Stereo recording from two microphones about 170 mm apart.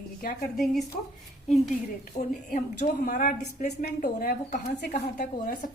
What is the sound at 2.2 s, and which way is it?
A woman's voice, 50° left (ahead or behind).